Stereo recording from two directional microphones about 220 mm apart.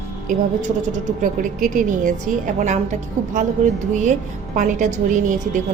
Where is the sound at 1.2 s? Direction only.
35° right (ahead or behind).